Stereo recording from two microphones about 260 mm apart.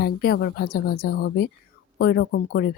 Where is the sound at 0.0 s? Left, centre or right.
Left.